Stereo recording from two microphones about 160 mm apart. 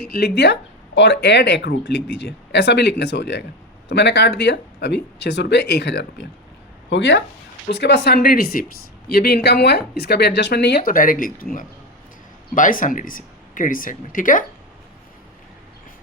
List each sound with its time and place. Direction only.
0.0 s speech: 80° left
7.7 s speech: 90° left; by 8.6 s 70° left (ahead or behind)
9.0 s speech: 80° left; by 11.4 s 60° left (ahead or behind)
12.5 s speech: 55° left (ahead or behind)